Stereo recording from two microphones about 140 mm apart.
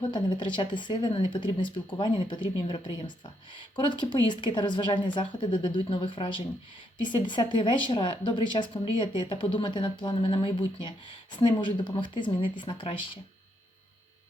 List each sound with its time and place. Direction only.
0.1 s speech: 35° left (ahead or behind)